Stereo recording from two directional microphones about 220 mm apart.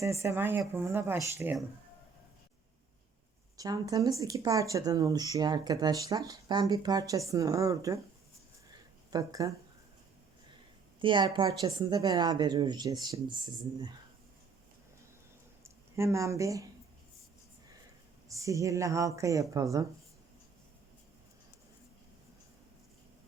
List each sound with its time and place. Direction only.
0.0 s speech: 15° right (ahead or behind)
3.6 s speech: 15° right (ahead or behind)
9.0 s speech: 15° right (ahead or behind)
11.0 s speech: 20° right (ahead or behind)
15.6 s speech: 15° right (ahead or behind)
18.3 s speech: 15° right (ahead or behind)